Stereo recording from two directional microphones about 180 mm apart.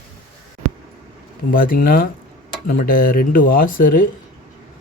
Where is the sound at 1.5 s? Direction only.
50° left (ahead or behind).